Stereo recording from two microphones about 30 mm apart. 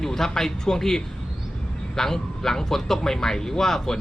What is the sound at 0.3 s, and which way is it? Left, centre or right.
Speech, centre.